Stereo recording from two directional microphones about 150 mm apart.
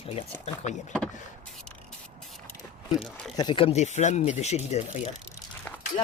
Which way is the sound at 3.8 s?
50° left (ahead or behind).